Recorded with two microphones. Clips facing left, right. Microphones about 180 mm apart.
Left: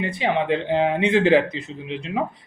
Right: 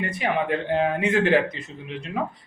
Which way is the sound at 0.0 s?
25° left (ahead or behind).